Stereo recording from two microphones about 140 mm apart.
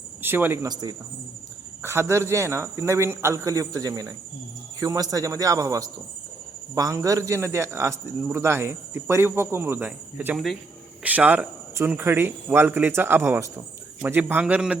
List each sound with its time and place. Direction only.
0.2 s speech: 15° right (ahead or behind)
0.7 s speech: 30° right (ahead or behind)
1.8 s speech: 20° right (ahead or behind)